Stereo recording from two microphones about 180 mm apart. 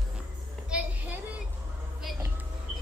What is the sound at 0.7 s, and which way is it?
Child singing, 5° right (ahead or behind).